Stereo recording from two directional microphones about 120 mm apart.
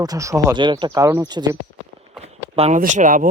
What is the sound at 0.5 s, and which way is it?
Speech, 40° right (ahead or behind).